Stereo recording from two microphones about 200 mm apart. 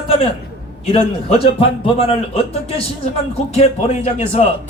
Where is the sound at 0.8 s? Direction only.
30° left (ahead or behind).